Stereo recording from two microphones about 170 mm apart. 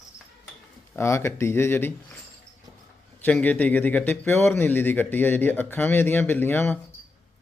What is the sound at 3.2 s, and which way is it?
Speech, 10° left (ahead or behind).